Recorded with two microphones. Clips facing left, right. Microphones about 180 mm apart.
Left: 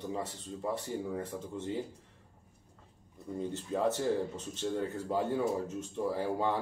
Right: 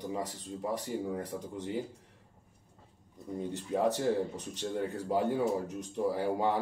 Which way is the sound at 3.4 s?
15° right (ahead or behind).